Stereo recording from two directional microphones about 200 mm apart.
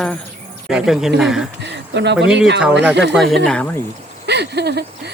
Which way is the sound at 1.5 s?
60° right (ahead or behind).